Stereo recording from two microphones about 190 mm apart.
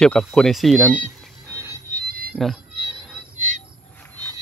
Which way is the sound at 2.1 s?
55° right (ahead or behind).